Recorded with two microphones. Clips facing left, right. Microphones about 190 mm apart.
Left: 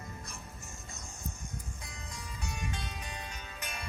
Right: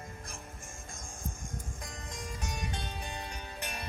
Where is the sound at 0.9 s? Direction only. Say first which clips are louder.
Right 2 dB; 50° right (ahead or behind).